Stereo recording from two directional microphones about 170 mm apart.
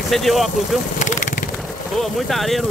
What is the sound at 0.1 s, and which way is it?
Speech, centre (ahead or behind).